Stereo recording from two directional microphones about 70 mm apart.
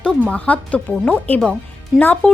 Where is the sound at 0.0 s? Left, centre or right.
Centre.